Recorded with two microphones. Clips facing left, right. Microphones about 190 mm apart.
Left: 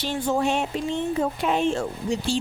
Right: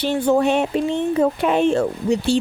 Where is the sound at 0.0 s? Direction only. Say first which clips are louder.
Right 7 dB; 60° right (ahead or behind).